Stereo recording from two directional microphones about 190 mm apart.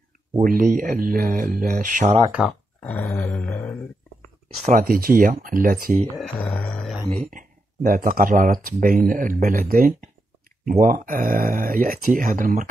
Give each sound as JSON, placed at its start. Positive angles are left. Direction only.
{"t": 0.4, "sound": "speech", "side_deg": -45}
{"t": 2.8, "sound": "grunt", "side_deg": 10}
{"t": 4.6, "sound": "speech", "side_deg": -50}
{"t": 6.1, "sound": "speech", "side_deg": 0}
{"t": 7.3, "sound": "speech", "side_deg": -45}